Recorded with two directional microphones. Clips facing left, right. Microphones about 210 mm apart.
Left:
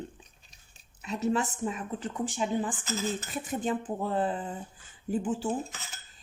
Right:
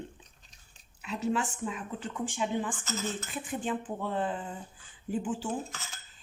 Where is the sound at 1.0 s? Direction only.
40° left (ahead or behind).